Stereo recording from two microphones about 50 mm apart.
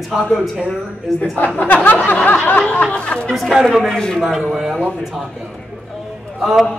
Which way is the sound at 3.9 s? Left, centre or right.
Centre.